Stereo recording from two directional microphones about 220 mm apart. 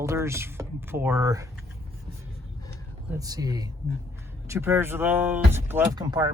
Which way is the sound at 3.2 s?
15° right (ahead or behind).